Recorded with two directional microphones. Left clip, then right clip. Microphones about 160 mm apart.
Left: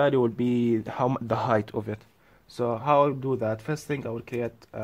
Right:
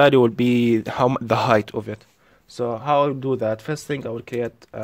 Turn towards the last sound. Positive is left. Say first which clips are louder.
# right 5 dB
turn(degrees=-15)  # may be behind; listen again after turning